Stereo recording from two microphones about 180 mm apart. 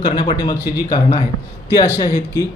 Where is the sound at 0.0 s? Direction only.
25° left (ahead or behind).